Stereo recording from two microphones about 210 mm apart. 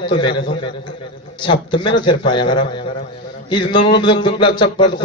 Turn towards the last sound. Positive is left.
turn(degrees=20)  # may be behind; listen again after turning